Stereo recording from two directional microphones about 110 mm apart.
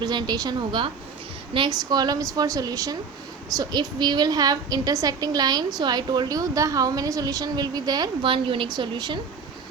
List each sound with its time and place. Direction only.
0.0 s a woman's voice: 40° right (ahead or behind)
8.2 s a woman's voice: 50° right (ahead or behind)